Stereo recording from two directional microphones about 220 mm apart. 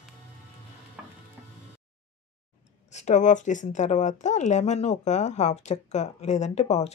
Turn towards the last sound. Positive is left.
turn(degrees=30)  # may be behind; listen again after turning